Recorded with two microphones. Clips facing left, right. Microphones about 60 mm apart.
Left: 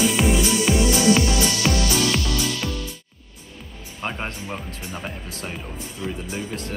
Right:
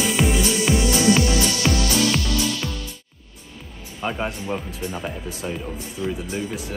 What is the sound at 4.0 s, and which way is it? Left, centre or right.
Speech, centre.